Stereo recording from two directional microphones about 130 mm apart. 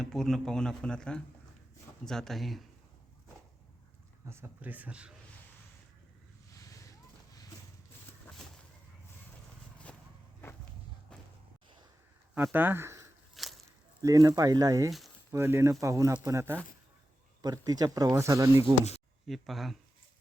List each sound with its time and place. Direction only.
0.0 s speech: 5° left (ahead or behind)
4.3 s a man's voice: 20° right (ahead or behind)
12.3 s speech: 15° right (ahead or behind)
13.3 s a sound: centre (ahead or behind)
14.0 s speech: 25° right (ahead or behind)
19.3 s speech: centre (ahead or behind)